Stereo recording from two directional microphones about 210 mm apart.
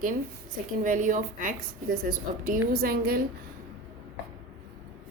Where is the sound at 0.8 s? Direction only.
40° right (ahead or behind).